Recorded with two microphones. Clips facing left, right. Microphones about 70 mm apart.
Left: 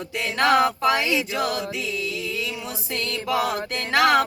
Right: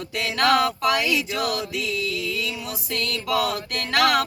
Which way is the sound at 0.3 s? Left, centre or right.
Left.